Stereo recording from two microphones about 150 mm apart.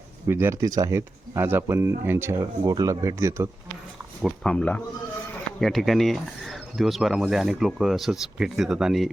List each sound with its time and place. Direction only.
0.3 s speech: 15° right (ahead or behind)
4.2 s speech: 5° left (ahead or behind)